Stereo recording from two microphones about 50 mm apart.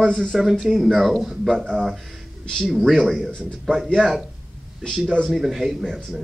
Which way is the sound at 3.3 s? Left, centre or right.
Centre.